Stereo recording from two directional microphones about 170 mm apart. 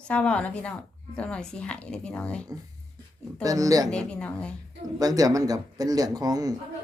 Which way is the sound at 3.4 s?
20° right (ahead or behind).